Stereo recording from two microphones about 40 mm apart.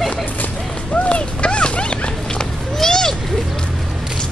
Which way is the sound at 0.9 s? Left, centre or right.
Left.